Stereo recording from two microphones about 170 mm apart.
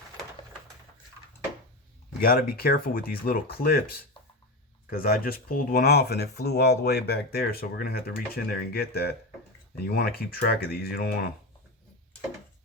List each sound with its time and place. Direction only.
2.2 s speech: 60° left (ahead or behind)